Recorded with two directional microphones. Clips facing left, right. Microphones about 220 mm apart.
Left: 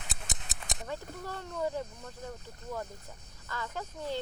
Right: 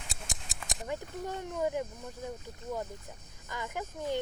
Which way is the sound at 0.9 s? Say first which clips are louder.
Right 4 dB; 15° right (ahead or behind).